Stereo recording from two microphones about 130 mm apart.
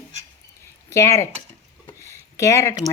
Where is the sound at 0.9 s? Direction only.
25° left (ahead or behind).